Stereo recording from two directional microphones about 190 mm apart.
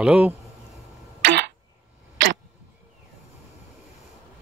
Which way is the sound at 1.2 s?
60° right (ahead or behind).